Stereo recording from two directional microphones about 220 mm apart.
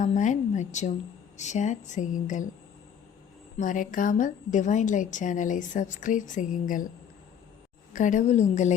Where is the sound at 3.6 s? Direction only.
35° left (ahead or behind).